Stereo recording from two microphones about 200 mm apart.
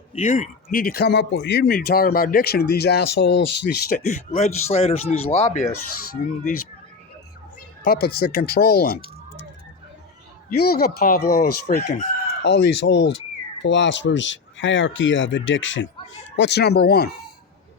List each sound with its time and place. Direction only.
0.1 s a man's voice: 35° left (ahead or behind); by 3.9 s 60° left (ahead or behind)
3.9 s speech: 40° left (ahead or behind)
7.9 s a man's voice: 50° left (ahead or behind)
10.5 s a man's voice: 50° left (ahead or behind)
11.7 s chicken: 50° left (ahead or behind); by 15.9 s 70° left (ahead or behind)
16.4 s a man's voice: 55° left (ahead or behind)